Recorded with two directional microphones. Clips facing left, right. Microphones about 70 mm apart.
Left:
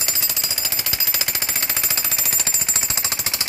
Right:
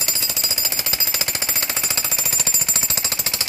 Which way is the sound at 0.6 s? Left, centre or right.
Centre.